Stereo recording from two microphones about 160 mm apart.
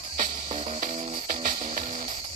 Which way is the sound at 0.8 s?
65° right (ahead or behind).